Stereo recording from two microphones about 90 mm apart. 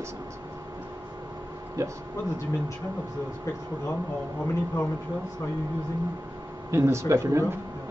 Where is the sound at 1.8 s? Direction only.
40° right (ahead or behind).